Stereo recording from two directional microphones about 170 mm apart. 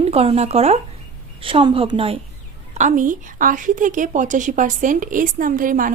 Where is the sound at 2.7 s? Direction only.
45° right (ahead or behind).